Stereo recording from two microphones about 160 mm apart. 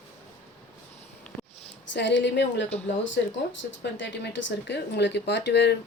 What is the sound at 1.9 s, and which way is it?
Speech, 90° left.